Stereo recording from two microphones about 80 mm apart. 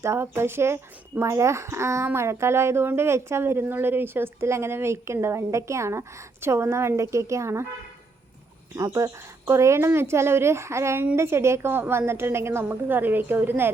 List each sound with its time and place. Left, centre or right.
0.0 s a woman's voice: right
8.7 s a woman's voice: right